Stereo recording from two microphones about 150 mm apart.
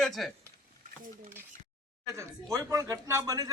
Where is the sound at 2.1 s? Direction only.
20° right (ahead or behind).